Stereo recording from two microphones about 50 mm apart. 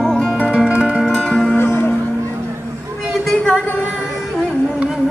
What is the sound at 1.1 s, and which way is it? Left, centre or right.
Music, centre.